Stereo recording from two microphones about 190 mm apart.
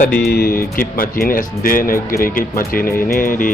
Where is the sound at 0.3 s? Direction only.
55° left (ahead or behind).